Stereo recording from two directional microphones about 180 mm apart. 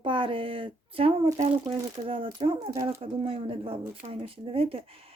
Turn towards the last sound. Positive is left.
turn(degrees=-30)  # may be behind; listen again after turning